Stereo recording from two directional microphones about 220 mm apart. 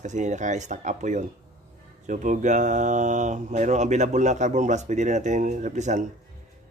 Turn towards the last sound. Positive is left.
turn(degrees=-35)  # may be behind; listen again after turning